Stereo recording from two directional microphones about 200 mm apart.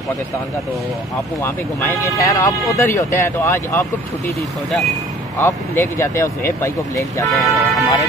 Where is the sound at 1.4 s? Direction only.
10° left (ahead or behind).